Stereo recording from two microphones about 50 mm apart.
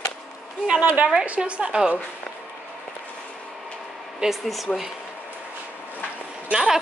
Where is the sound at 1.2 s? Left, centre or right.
Right.